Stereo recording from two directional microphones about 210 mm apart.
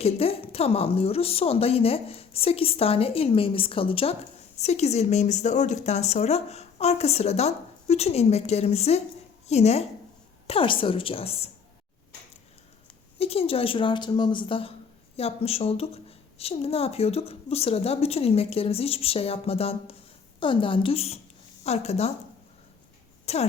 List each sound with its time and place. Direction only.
0.0 s a woman's voice: 30° left (ahead or behind)
13.1 s a woman's voice: 30° left (ahead or behind)
23.2 s a sound: 30° left (ahead or behind)